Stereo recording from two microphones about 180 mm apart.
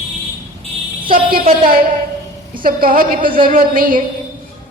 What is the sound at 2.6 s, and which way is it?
A woman's voice, 50° right (ahead or behind).